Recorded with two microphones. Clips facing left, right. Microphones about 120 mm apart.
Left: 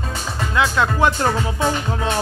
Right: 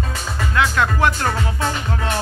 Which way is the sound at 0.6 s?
20° left (ahead or behind).